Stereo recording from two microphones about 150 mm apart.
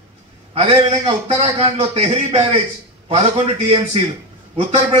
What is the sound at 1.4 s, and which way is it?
A man's voice, 45° right (ahead or behind).